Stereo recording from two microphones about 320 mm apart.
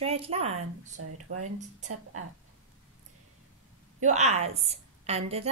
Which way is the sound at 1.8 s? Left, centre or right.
Right.